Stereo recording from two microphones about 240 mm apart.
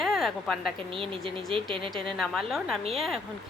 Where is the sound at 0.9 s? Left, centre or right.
Right.